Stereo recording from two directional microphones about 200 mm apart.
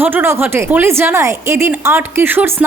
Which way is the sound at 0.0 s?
10° right (ahead or behind).